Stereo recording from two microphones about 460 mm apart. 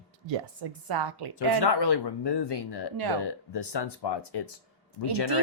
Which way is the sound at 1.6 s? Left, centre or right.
Left.